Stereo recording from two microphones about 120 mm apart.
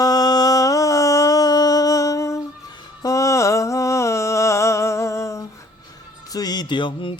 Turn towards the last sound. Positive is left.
turn(degrees=45)  # may be behind; listen again after turning